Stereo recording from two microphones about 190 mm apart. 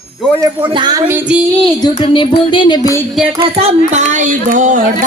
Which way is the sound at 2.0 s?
25° left (ahead or behind).